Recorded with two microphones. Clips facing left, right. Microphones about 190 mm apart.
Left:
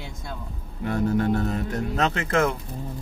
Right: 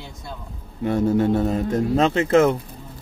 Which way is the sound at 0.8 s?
25° right (ahead or behind).